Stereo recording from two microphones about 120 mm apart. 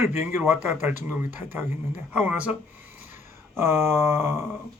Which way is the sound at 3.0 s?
20° right (ahead or behind).